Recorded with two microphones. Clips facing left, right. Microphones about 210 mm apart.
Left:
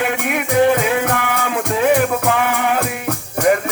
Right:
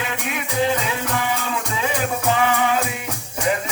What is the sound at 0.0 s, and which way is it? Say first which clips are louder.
Music: left 7 dB; 60° left (ahead or behind).